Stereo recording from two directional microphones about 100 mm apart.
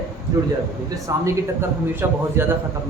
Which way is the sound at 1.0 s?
30° right (ahead or behind).